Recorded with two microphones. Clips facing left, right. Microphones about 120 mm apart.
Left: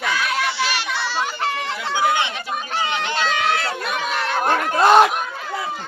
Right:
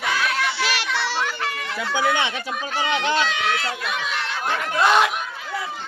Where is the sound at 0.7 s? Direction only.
80° right.